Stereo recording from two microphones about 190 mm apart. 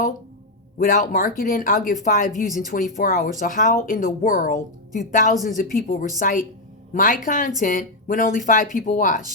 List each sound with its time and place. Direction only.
0.8 s speech: 45° left (ahead or behind)